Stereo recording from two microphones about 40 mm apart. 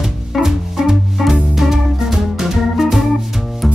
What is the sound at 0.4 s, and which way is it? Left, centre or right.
Music, centre.